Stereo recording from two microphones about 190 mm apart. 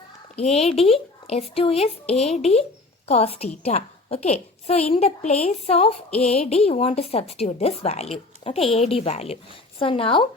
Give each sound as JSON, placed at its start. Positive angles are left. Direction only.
{"t": 0.3, "sound": "speech", "side_deg": 35}